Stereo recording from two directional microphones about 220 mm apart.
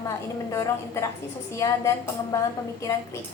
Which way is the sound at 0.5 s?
15° left (ahead or behind).